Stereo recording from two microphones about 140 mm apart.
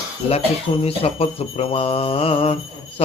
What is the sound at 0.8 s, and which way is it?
Speech, 45° left (ahead or behind).